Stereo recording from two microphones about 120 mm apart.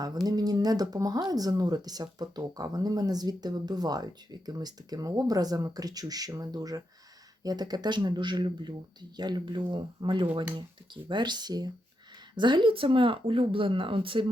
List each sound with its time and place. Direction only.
0.3 s speech: 35° right (ahead or behind)